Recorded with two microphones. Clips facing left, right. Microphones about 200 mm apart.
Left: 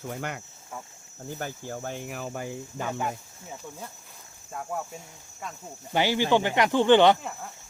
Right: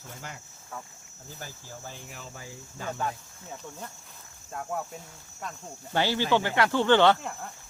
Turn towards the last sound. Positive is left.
turn(degrees=0)  # may be behind; listen again after turning